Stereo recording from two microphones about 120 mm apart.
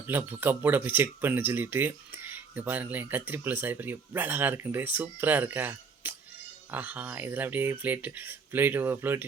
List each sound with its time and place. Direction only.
0.1 s speech: 15° right (ahead or behind)